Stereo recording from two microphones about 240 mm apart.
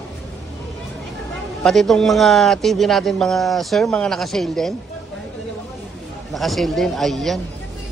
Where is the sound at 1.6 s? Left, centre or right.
Centre.